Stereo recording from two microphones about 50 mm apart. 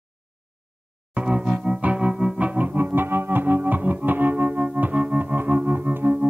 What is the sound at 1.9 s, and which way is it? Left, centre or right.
Music, centre.